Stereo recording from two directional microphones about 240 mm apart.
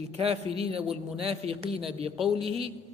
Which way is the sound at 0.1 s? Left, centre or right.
Right.